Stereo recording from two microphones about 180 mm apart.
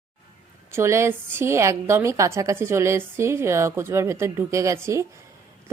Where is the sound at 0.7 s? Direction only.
15° right (ahead or behind).